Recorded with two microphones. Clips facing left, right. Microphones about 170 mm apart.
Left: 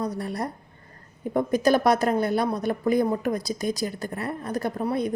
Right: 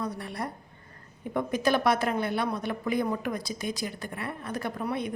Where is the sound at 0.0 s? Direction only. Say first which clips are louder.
Left 5 dB; 40° left (ahead or behind).